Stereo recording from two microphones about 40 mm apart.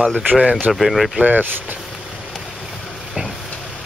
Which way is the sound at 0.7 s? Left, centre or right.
Centre.